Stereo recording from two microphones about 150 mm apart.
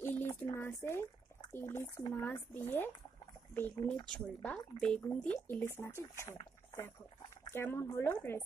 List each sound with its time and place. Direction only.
0.0 s speech: 15° left (ahead or behind)
7.5 s speech: 15° left (ahead or behind)